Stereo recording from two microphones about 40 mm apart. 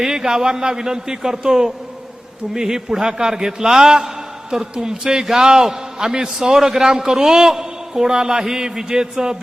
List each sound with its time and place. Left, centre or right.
0.0 s a man's voice: centre